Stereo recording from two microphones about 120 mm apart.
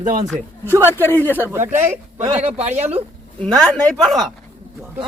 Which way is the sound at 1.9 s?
65° right (ahead or behind).